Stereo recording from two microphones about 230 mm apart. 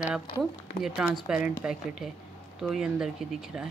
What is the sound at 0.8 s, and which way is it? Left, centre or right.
Speech, centre.